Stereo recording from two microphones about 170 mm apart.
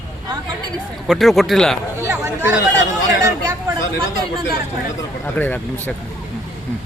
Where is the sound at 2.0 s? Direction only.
15° right (ahead or behind).